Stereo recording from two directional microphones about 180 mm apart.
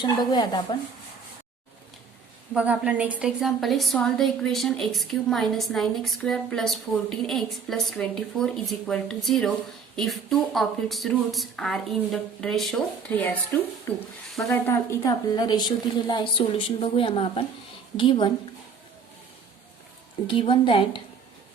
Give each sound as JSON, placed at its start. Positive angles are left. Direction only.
{"t": 0.0, "sound": "a woman's voice", "side_deg": 25}
{"t": 2.5, "sound": "a woman's voice", "side_deg": -5}
{"t": 20.2, "sound": "a woman's voice", "side_deg": 30}